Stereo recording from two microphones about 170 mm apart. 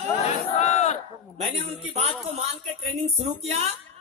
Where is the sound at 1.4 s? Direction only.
40° right (ahead or behind).